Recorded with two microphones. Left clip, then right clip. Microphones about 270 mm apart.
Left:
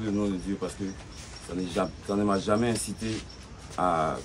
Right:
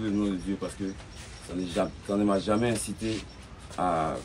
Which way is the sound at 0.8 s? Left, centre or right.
Centre.